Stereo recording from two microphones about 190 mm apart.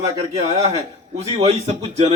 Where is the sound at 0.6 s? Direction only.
35° right (ahead or behind).